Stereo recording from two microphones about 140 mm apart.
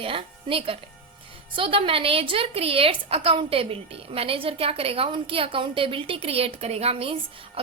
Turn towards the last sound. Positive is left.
turn(degrees=-45)  # may be behind; listen again after turning